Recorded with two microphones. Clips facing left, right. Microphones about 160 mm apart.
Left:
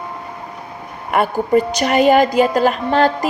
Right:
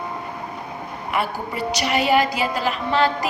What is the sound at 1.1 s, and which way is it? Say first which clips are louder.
A woman's voice: left 11 dB; 50° left (ahead or behind).